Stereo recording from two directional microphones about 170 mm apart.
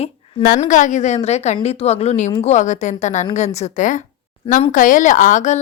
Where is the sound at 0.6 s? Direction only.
45° left (ahead or behind).